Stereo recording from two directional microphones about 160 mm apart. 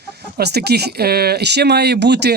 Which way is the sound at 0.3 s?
90° right.